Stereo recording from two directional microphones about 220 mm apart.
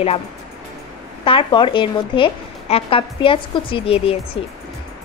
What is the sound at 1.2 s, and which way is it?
A woman's voice, 25° left (ahead or behind).